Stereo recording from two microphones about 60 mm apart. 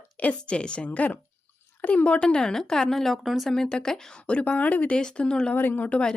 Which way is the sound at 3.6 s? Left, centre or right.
Centre.